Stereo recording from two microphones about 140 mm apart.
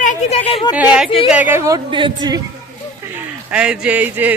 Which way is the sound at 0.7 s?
10° right (ahead or behind).